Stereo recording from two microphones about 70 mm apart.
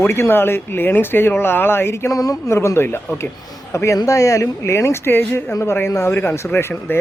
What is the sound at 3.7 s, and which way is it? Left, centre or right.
Speech, left.